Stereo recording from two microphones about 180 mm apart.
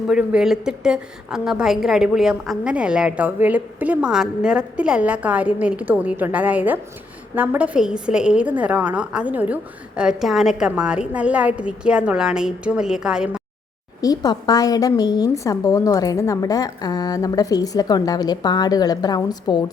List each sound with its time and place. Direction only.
0.1 s a woman's voice: 5° right (ahead or behind)
14.0 s a woman's voice: 20° left (ahead or behind)